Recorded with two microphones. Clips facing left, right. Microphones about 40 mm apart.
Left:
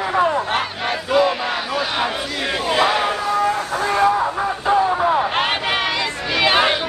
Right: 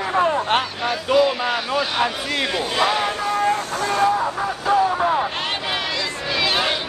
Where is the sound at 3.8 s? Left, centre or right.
Left.